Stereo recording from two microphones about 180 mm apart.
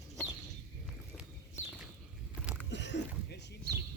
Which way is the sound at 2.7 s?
75° left (ahead or behind).